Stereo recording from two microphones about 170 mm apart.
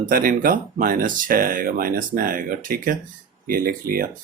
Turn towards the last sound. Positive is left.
turn(degrees=-55)  # may be behind; listen again after turning